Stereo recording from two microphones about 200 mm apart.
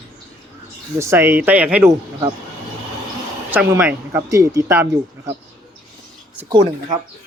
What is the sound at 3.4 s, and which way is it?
Speech, 10° right (ahead or behind).